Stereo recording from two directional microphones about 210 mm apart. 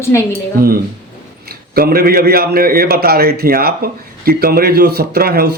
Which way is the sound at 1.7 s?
45° right (ahead or behind).